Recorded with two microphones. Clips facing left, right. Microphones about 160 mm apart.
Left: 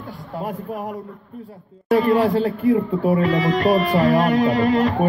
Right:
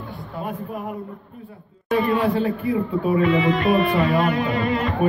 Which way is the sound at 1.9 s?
40° left (ahead or behind).